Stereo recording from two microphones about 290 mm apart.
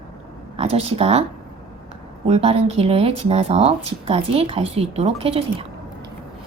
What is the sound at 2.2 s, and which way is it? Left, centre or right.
Speech, right.